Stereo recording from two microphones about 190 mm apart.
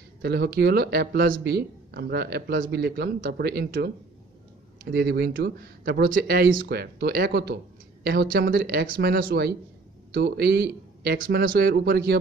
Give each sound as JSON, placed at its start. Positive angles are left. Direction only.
{"t": 0.2, "sound": "speech", "side_deg": -55}
{"t": 4.9, "sound": "speech", "side_deg": -60}